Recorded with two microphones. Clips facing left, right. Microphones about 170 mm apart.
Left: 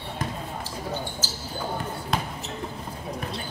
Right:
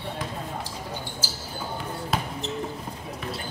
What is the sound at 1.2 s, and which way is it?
Basketball bounce, 10° right (ahead or behind).